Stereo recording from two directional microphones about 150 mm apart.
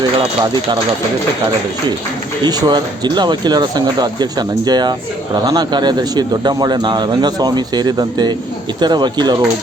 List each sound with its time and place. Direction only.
0.2 s speech: 30° right (ahead or behind)
2.4 s speech: 30° right (ahead or behind)